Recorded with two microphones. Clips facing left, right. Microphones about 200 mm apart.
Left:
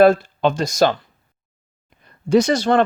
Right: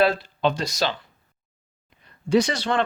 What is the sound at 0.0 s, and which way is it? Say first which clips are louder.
Speech: left 7 dB; 45° left (ahead or behind).